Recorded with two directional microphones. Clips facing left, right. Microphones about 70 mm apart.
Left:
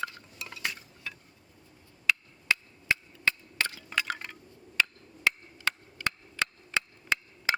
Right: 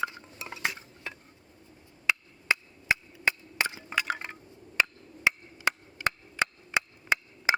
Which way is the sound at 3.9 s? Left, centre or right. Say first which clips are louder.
Right 2 dB; right.